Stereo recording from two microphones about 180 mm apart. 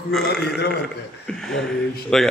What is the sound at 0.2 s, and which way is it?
Speech, 65° left (ahead or behind).